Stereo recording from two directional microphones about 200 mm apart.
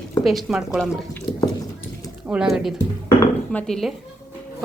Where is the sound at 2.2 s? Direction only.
5° right (ahead or behind).